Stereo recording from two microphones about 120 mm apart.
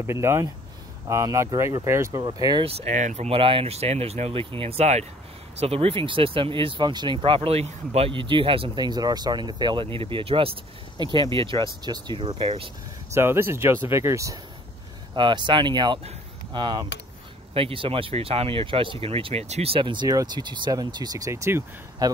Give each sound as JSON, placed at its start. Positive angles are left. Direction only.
{"t": 0.0, "sound": "speech", "side_deg": -20}
{"t": 2.2, "sound": "speech", "side_deg": -35}
{"t": 2.6, "sound": "speech", "side_deg": -60}
{"t": 3.3, "sound": "speech", "side_deg": -50}
{"t": 13.1, "sound": "speech", "side_deg": -20}
{"t": 15.1, "sound": "speech", "side_deg": -40}
{"t": 17.6, "sound": "speech", "side_deg": -50}